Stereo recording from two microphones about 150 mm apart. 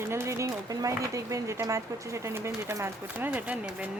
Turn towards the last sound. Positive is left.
turn(degrees=-10)  # may be behind; listen again after turning